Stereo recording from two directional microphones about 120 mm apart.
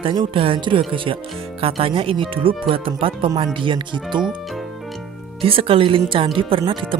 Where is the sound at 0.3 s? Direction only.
45° right (ahead or behind).